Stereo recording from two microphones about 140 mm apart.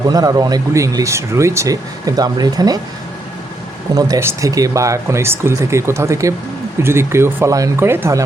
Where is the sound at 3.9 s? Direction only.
25° right (ahead or behind).